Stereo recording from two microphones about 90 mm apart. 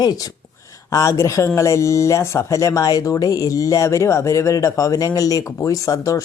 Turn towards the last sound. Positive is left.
turn(degrees=35)  # may be behind; listen again after turning